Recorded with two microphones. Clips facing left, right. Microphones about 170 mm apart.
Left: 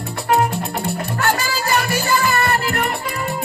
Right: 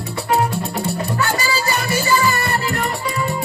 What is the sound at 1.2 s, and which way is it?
Music, 60° left (ahead or behind).